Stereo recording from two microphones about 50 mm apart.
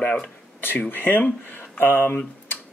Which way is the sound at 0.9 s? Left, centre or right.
Left.